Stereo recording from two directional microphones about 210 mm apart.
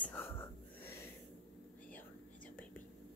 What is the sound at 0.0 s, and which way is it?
Wheeze, 10° left (ahead or behind).